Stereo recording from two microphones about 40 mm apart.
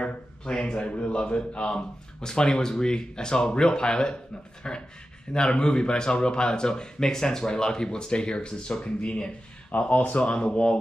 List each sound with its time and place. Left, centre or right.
0.0 s speech: left
9.8 s speech: left